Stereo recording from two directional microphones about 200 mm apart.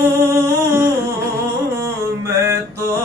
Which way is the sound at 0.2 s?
15° right (ahead or behind).